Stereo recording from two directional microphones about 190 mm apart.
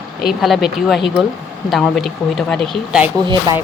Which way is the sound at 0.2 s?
Centre (ahead or behind).